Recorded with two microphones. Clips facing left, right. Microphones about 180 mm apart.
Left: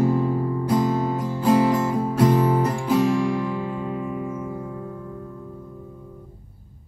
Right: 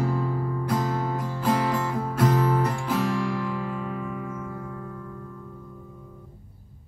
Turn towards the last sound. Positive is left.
turn(degrees=15)  # may be behind; listen again after turning